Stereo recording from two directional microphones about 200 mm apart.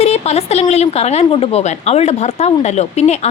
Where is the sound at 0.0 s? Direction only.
30° left (ahead or behind).